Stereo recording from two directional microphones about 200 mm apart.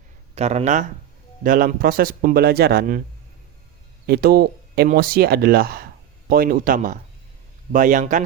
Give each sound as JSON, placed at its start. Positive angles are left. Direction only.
{"t": 0.3, "sound": "speech", "side_deg": -35}
{"t": 4.0, "sound": "speech", "side_deg": -50}